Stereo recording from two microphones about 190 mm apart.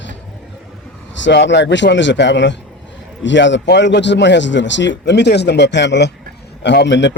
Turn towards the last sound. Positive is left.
turn(degrees=70)  # may be behind; listen again after turning